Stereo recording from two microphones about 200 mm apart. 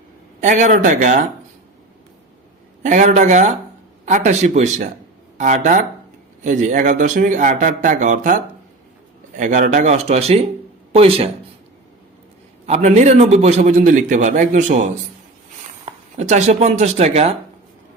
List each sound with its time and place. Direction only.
0.4 s a man's voice: 40° right (ahead or behind)
2.8 s a man's voice: 35° right (ahead or behind)
12.6 s a man's voice: 35° right (ahead or behind)
15.9 s speech: 35° right (ahead or behind)